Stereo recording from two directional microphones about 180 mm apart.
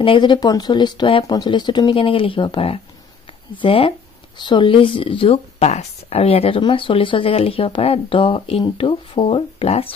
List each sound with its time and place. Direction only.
0.0 s speech: 25° left (ahead or behind)